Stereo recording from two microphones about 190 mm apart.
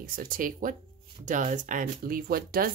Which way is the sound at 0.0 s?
50° right (ahead or behind).